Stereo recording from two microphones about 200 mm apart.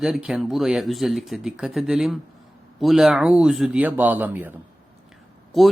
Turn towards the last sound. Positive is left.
turn(degrees=0)  # may be behind; listen again after turning